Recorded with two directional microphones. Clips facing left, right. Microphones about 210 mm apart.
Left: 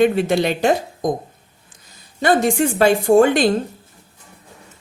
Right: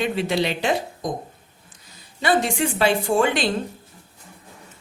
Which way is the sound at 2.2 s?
45° left (ahead or behind).